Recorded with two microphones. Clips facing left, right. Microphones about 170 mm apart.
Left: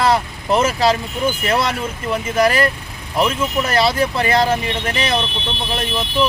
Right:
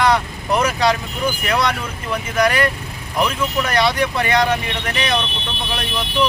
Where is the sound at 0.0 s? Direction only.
30° left (ahead or behind).